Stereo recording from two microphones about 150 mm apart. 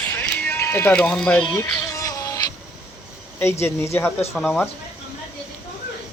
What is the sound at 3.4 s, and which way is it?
Speech, 15° left (ahead or behind).